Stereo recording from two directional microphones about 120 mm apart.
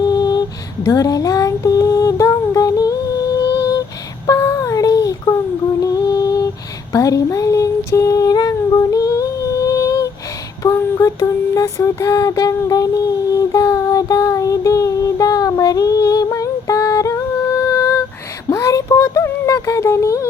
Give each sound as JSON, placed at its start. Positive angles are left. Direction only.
{"t": 0.0, "sound": "mantra", "side_deg": 35}
{"t": 0.9, "sound": "female singing", "side_deg": 30}
{"t": 4.3, "sound": "child singing", "side_deg": 25}
{"t": 5.8, "sound": "a sound", "side_deg": 30}
{"t": 6.9, "sound": "female singing", "side_deg": 30}
{"t": 10.6, "sound": "mantra", "side_deg": 25}
{"t": 17.6, "sound": "a sound", "side_deg": 30}
{"t": 18.4, "sound": "music", "side_deg": 30}